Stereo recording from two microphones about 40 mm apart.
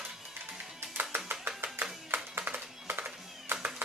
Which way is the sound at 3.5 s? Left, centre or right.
Right.